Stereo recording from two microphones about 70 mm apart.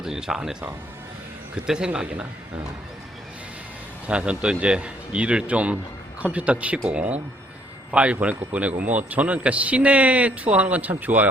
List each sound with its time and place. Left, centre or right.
0.0 s a man's voice: centre
1.6 s a man's voice: centre
4.0 s a man's voice: centre